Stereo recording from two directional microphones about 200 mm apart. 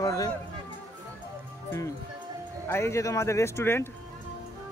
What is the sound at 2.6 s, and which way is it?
A man's voice, 15° left (ahead or behind).